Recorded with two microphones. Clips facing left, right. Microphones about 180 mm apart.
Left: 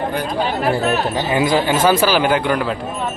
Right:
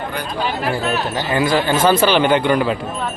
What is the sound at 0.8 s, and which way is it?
Speech, 40° left (ahead or behind).